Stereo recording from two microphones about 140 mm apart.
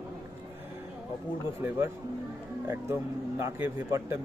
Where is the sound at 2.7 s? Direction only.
20° right (ahead or behind).